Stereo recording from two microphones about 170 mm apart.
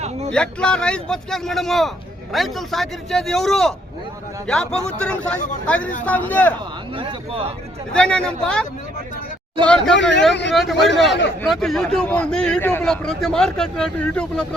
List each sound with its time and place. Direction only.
0.3 s speech: 5° left (ahead or behind)
6.9 s a man's voice: 30° right (ahead or behind)
7.9 s speech: 5° left (ahead or behind)
9.6 s speech: 5° left (ahead or behind)
9.9 s speech: 90° left
10.5 s speech: centre (ahead or behind)